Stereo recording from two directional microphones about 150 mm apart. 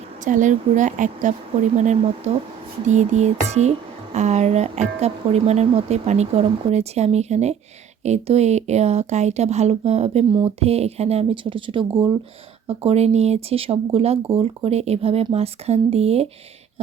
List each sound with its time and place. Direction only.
0.3 s speech: 55° right (ahead or behind); by 16.2 s 40° right (ahead or behind)